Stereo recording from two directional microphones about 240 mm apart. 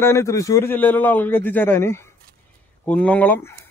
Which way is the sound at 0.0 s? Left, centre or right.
Centre.